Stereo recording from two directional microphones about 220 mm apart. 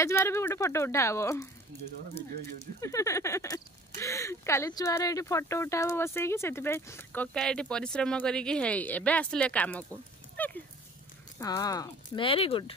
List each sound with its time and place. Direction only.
0.0 s speech: 10° left (ahead or behind)
2.6 s speech: 15° left (ahead or behind)
10.3 s dog: 5° left (ahead or behind)
11.3 s speech: 15° left (ahead or behind)